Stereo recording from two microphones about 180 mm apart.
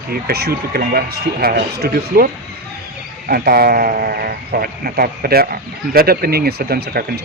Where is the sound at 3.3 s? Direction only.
55° right (ahead or behind).